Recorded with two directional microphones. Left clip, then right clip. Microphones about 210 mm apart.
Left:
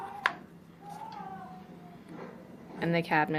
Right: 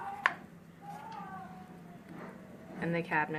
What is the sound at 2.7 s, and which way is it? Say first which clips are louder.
Speech: left 5 dB; 50° left (ahead or behind).